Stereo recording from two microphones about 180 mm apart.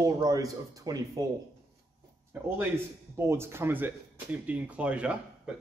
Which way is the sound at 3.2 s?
15° right (ahead or behind).